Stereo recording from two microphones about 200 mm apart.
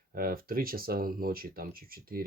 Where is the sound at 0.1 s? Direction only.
45° right (ahead or behind).